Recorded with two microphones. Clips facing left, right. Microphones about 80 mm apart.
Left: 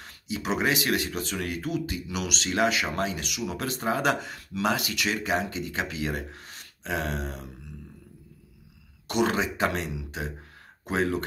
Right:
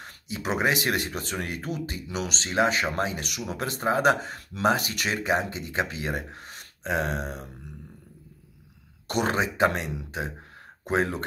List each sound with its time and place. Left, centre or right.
0.0 s a sound: right
0.7 s speech: right
9.0 s speech: right